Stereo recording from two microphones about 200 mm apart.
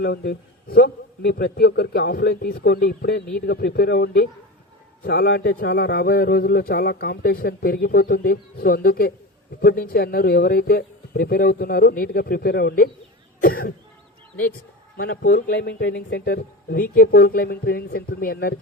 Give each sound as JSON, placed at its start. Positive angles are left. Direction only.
{"t": 0.0, "sound": "a man's voice", "side_deg": 50}
{"t": 5.0, "sound": "a man's voice", "side_deg": 70}
{"t": 5.5, "sound": "a man's voice", "side_deg": 55}
{"t": 15.2, "sound": "a man's voice", "side_deg": 45}